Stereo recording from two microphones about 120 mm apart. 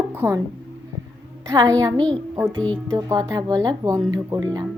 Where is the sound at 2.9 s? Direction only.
25° right (ahead or behind).